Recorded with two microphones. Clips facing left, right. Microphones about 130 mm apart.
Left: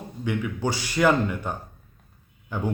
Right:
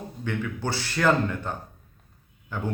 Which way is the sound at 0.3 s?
15° left (ahead or behind).